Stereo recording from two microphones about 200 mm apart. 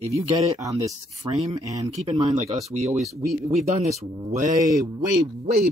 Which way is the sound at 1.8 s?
30° right (ahead or behind).